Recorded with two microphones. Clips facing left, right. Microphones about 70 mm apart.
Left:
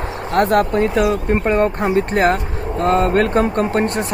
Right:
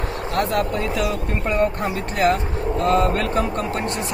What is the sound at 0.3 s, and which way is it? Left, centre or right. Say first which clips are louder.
Speech: left 7 dB; left.